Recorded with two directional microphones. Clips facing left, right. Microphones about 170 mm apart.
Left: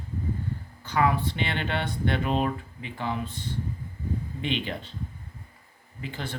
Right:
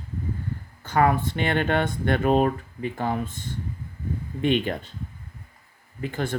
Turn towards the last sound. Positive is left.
turn(degrees=-50)  # may be behind; listen again after turning